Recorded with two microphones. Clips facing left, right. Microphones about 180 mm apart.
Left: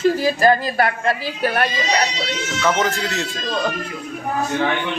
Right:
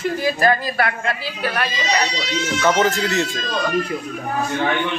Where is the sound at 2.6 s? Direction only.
Centre (ahead or behind).